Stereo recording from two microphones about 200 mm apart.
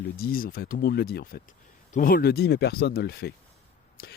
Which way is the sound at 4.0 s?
50° left (ahead or behind).